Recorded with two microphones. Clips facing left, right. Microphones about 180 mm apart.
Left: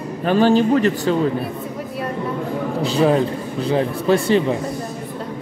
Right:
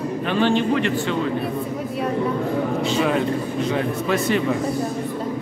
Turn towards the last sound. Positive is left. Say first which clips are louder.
# left 4 dB
turn(degrees=30)  # may be behind; listen again after turning